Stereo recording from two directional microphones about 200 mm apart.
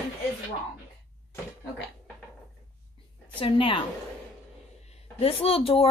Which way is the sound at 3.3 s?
25° left (ahead or behind).